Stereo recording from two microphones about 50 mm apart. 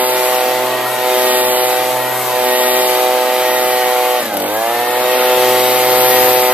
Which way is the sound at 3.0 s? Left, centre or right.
Centre.